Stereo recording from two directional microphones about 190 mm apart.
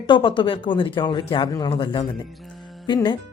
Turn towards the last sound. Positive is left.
turn(degrees=25)  # may be behind; listen again after turning